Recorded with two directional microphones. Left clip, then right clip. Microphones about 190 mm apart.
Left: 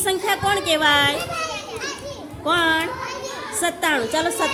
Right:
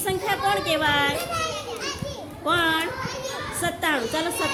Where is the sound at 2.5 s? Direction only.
15° left (ahead or behind).